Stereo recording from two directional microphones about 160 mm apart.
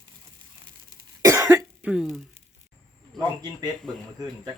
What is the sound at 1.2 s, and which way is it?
Cough, 20° right (ahead or behind).